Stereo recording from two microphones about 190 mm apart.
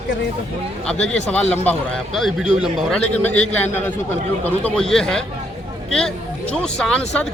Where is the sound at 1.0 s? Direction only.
5° left (ahead or behind).